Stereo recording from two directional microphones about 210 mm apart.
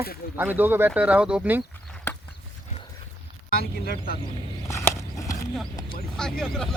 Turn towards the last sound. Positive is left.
turn(degrees=0)  # may be behind; listen again after turning